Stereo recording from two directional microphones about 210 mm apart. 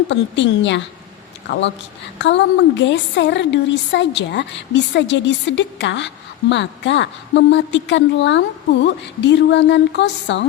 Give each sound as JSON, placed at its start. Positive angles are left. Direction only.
{"t": 0.1, "sound": "a woman's voice", "side_deg": 60}